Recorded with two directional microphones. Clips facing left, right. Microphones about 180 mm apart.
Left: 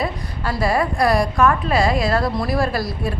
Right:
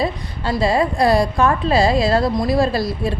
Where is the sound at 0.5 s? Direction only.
25° right (ahead or behind).